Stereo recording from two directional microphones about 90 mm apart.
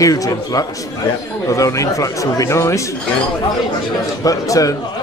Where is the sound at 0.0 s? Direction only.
40° left (ahead or behind).